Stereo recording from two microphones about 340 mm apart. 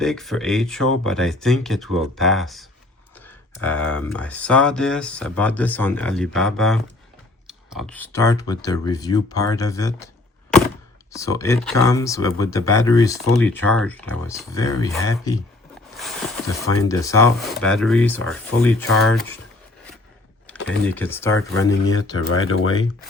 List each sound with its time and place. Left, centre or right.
0.0 s speech: centre
11.1 s speech: centre
20.7 s speech: centre
21.8 s speech: left